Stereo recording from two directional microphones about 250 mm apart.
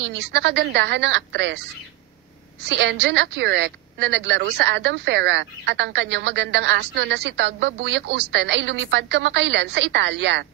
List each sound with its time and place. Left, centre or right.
0.2 s a woman's voice: right